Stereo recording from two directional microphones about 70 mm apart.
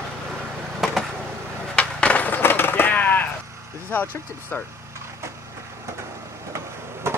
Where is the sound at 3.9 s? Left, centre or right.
Left.